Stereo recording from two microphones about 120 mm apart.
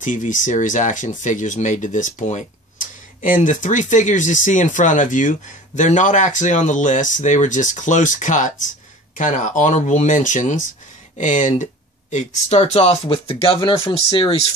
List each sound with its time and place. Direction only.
0.0 s speech: 90° left; by 14.3 s 45° left (ahead or behind)